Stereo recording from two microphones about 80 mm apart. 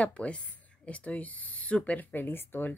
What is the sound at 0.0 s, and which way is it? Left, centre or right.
Speech, centre.